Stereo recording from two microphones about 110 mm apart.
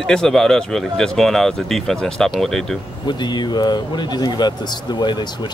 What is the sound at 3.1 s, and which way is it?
Speech, 40° left (ahead or behind).